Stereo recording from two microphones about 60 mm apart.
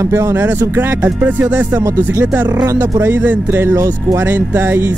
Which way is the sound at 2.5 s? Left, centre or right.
Right.